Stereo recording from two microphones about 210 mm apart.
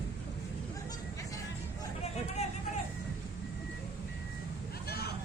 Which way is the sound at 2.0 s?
30° left (ahead or behind).